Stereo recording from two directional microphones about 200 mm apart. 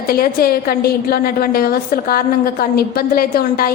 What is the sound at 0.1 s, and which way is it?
A woman's voice, 45° left (ahead or behind).